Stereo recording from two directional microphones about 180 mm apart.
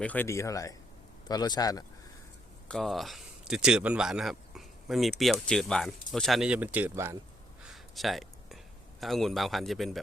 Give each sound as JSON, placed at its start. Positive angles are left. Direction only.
{"t": 0.0, "sound": "speech", "side_deg": 10}
{"t": 2.6, "sound": "speech", "side_deg": 0}
{"t": 7.6, "sound": "a sound", "side_deg": 0}
{"t": 9.0, "sound": "speech", "side_deg": 0}